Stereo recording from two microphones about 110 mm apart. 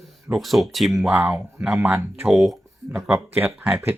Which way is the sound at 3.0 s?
20° right (ahead or behind).